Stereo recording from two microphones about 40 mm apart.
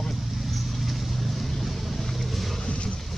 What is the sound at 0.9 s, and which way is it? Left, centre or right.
Vehicle, centre.